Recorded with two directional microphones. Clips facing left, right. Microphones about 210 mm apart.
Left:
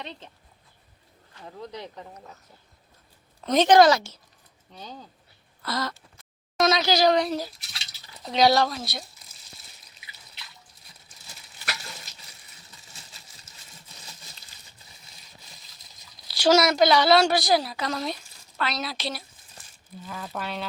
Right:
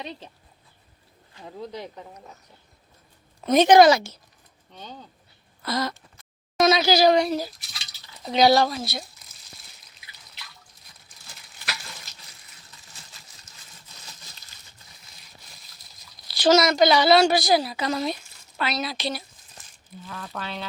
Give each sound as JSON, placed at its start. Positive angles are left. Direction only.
{"t": 0.0, "sound": "speech", "side_deg": -10}
{"t": 1.4, "sound": "speech", "side_deg": -15}
{"t": 3.4, "sound": "speech", "side_deg": -10}
{"t": 4.7, "sound": "a woman's voice", "side_deg": 5}
{"t": 5.6, "sound": "speech", "side_deg": -15}
{"t": 6.6, "sound": "a woman's voice", "side_deg": -5}
{"t": 16.3, "sound": "a woman's voice", "side_deg": 10}